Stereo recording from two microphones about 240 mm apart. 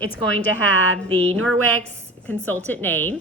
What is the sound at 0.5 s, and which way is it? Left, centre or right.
Speech, right.